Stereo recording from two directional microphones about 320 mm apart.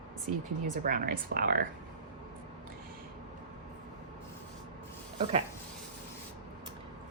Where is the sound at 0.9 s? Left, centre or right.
Right.